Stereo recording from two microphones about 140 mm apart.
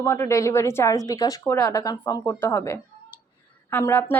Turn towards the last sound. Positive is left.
turn(degrees=15)  # may be behind; listen again after turning